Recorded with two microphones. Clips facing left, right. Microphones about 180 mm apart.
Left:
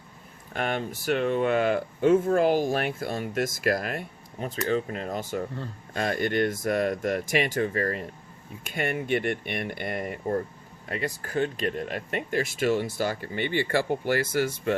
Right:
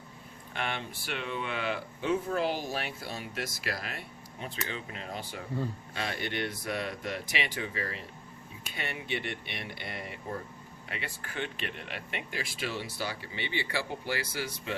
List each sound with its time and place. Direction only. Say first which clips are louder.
0.5 s speech: left 7 dB; 45° left (ahead or behind)